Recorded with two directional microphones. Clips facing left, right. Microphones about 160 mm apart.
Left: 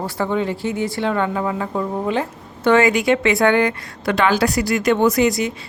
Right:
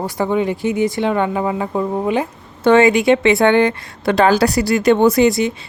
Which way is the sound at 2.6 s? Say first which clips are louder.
Right 4 dB; 30° right (ahead or behind).